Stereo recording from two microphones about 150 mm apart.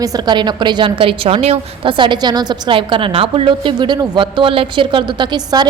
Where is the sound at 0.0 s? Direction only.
25° right (ahead or behind).